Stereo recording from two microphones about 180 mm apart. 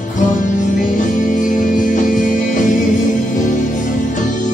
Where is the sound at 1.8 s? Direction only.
45° left (ahead or behind).